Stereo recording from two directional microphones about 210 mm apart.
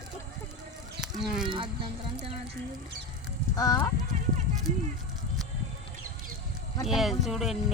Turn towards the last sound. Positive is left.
turn(degrees=0)  # may be behind; listen again after turning